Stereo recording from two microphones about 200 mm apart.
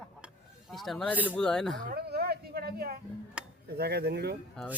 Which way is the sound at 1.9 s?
50° right (ahead or behind).